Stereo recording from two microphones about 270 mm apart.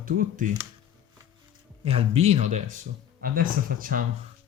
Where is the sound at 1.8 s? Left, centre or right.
Right.